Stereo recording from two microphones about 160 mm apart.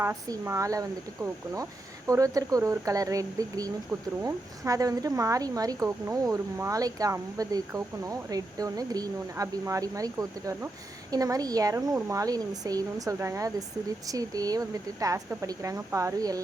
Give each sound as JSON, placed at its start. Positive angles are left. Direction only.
{"t": 0.0, "sound": "speech", "side_deg": -15}